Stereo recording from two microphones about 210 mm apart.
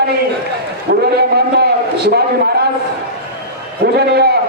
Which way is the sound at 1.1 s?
50° right (ahead or behind).